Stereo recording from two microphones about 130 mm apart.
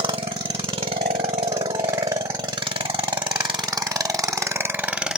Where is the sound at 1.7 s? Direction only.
30° right (ahead or behind).